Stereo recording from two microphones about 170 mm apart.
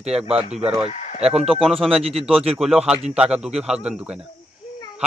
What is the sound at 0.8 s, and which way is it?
Speech, 45° left (ahead or behind).